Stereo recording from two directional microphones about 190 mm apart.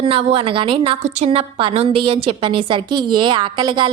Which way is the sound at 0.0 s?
30° right (ahead or behind).